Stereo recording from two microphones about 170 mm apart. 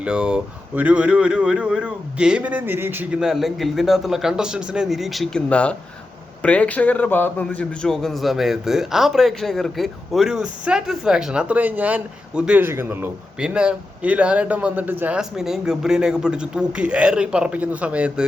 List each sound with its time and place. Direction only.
0.0 s a man's voice: 5° right (ahead or behind)